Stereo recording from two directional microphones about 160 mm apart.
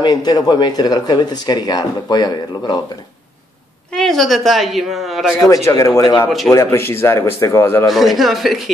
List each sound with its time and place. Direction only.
0.0 s speech: 25° left (ahead or behind)
3.9 s a woman's voice: centre (ahead or behind)
5.7 s speech: 20° left (ahead or behind)
7.9 s a woman's voice: centre (ahead or behind)